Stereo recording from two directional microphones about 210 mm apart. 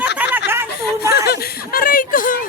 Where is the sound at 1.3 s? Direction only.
45° left (ahead or behind).